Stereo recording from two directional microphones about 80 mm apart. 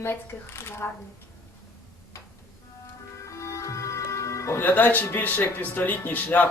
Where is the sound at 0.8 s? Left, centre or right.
Left.